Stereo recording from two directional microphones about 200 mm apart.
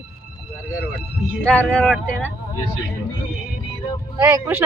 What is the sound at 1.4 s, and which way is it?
Speech, 5° left (ahead or behind).